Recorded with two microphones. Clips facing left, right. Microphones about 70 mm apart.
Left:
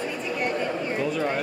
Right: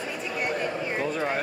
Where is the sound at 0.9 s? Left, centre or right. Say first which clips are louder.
Left 2 dB; right.